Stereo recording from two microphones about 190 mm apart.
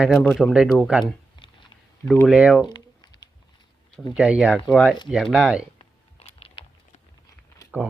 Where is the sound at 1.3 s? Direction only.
25° left (ahead or behind).